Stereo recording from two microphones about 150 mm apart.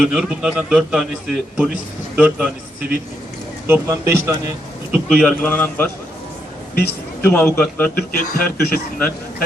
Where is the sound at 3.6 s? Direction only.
20° right (ahead or behind).